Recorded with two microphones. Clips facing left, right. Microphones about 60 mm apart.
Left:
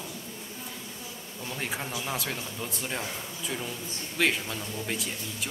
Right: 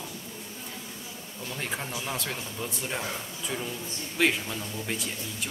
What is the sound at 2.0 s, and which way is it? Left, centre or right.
Speech, centre.